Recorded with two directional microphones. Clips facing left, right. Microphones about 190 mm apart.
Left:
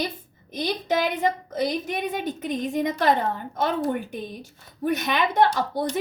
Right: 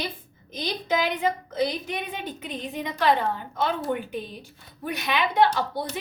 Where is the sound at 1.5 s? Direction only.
45° left (ahead or behind).